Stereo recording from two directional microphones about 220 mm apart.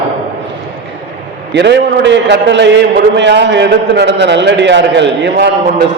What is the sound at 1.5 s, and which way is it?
A man's voice, 50° right (ahead or behind).